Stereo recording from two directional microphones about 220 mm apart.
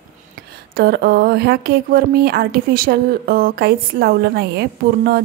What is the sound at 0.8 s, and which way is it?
A woman's voice, 45° right (ahead or behind).